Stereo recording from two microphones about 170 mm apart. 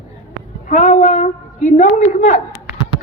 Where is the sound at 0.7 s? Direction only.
45° left (ahead or behind).